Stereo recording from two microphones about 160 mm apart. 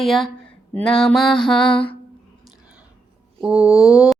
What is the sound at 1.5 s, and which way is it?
Mantra, 30° left (ahead or behind).